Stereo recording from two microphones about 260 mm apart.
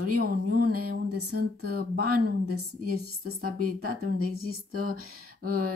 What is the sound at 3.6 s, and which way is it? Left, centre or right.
Speech, right.